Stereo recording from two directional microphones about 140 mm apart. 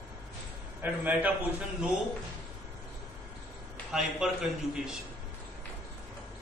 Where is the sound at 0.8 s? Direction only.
10° right (ahead or behind).